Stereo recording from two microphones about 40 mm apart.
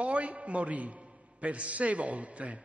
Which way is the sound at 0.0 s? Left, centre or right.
Right.